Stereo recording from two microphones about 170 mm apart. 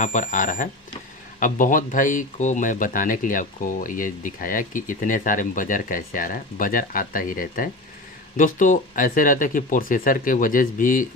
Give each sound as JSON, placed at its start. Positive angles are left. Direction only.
{"t": 0.0, "sound": "speech", "side_deg": 50}